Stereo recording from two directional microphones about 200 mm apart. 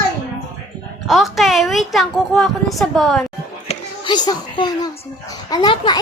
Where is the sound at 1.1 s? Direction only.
Centre (ahead or behind).